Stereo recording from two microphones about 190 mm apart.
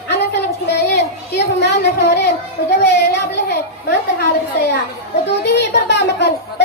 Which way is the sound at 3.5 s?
60° left (ahead or behind).